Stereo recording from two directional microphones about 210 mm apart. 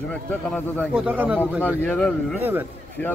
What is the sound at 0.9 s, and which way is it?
Speech, 5° right (ahead or behind).